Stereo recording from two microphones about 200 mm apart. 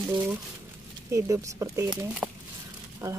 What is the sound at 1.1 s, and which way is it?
Speech, 15° right (ahead or behind).